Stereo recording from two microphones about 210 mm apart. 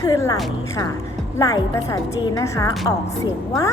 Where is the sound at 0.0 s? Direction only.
15° left (ahead or behind).